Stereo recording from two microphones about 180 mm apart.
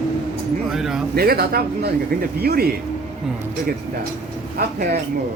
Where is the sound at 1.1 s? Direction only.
55° right (ahead or behind).